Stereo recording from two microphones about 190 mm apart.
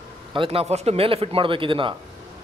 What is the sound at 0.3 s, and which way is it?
A man's voice, 30° right (ahead or behind).